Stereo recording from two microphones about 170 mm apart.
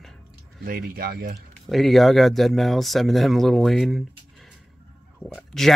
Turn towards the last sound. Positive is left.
turn(degrees=0)  # may be behind; listen again after turning